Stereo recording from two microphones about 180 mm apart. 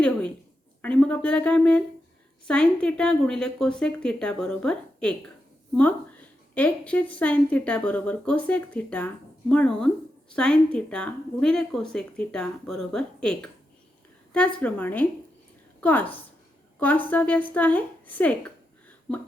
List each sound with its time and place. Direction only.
0.0 s a woman's voice: 5° left (ahead or behind)
6.5 s a woman's voice: 10° left (ahead or behind)
14.6 s a woman's voice: 10° left (ahead or behind)